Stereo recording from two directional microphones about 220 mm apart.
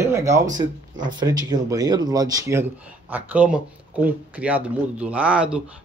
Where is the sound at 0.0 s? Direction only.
15° right (ahead or behind).